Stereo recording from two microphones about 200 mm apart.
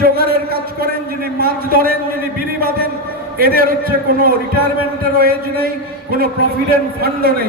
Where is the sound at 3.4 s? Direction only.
50° right (ahead or behind).